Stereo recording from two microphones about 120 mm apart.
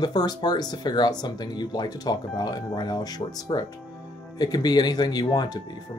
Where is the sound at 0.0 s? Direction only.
35° left (ahead or behind).